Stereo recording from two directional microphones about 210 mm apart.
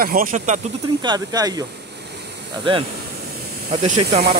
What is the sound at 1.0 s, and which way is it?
Speech, 20° right (ahead or behind).